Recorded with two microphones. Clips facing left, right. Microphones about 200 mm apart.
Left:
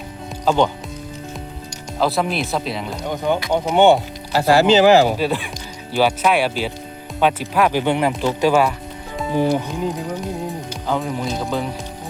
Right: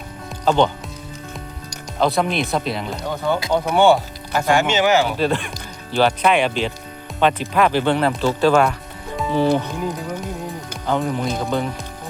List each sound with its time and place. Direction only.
0.4 s speech: 10° left (ahead or behind)
2.0 s speech: 5° left (ahead or behind)
3.1 s speech: 15° left (ahead or behind)
4.3 s speech: 35° left (ahead or behind)
5.1 s speech: 5° left (ahead or behind)
10.8 s speech: centre (ahead or behind)